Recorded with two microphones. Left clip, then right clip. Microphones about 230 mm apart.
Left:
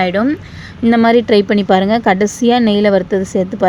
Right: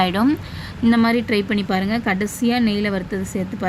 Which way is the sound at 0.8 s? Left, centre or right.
Centre.